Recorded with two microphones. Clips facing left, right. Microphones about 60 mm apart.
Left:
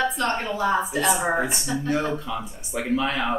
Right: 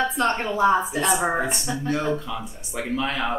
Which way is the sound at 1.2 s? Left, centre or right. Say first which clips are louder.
Even; centre.